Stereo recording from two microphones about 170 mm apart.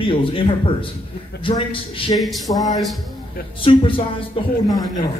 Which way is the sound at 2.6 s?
20° left (ahead or behind).